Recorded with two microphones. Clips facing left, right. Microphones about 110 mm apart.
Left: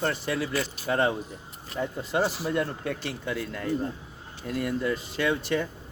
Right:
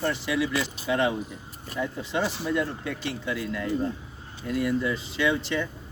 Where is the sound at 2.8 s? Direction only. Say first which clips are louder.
Even; 50° left (ahead or behind).